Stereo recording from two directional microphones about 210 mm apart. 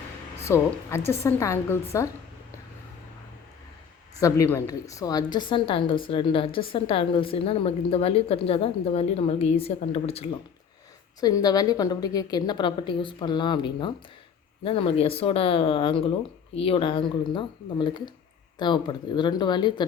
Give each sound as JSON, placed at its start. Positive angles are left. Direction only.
{"t": 0.4, "sound": "a woman's voice", "side_deg": 10}
{"t": 4.2, "sound": "a woman's voice", "side_deg": 15}
{"t": 11.2, "sound": "a woman's voice", "side_deg": 20}